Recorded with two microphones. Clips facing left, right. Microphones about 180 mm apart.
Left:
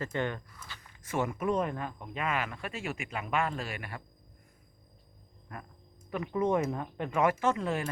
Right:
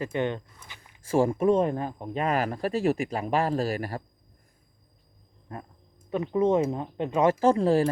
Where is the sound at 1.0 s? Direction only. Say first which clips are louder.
Right 9 dB; 30° right (ahead or behind).